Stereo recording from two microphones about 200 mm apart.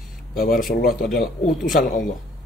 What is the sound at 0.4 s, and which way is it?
Speech, 45° left (ahead or behind).